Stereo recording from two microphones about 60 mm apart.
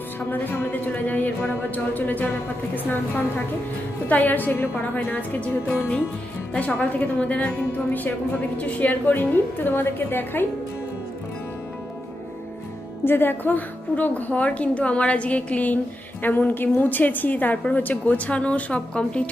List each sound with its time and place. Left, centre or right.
0.3 s a woman's voice: left
4.0 s a woman's voice: left
13.1 s a woman's voice: left; by 19.2 s centre